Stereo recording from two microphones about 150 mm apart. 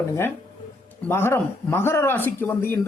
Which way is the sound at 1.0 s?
15° left (ahead or behind).